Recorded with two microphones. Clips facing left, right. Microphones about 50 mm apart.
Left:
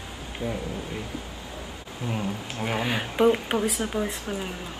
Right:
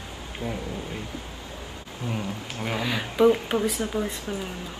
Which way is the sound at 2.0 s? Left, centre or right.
Centre.